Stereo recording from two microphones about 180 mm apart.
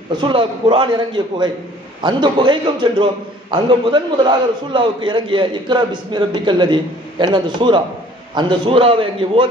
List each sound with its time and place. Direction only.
0.2 s a man's voice: 30° right (ahead or behind)